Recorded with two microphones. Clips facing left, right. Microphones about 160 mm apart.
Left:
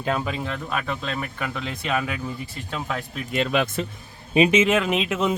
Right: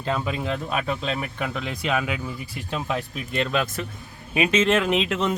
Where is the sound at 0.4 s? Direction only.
15° right (ahead or behind).